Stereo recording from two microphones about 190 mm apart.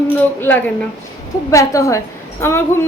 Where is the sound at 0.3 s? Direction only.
10° left (ahead or behind).